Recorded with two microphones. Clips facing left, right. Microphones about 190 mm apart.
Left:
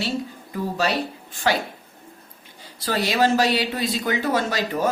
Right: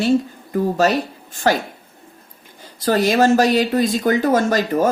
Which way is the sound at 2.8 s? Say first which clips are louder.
Right 6 dB; 45° right (ahead or behind).